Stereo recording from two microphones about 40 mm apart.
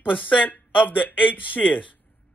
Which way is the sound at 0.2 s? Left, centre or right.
Left.